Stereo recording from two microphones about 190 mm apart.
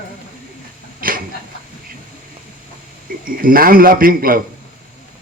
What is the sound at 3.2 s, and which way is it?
A man's voice, 50° right (ahead or behind).